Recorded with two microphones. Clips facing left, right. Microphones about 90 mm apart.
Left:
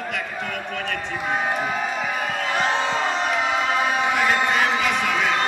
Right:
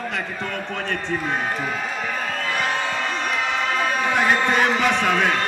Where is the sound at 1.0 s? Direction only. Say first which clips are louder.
Left 1 dB; 10° left (ahead or behind).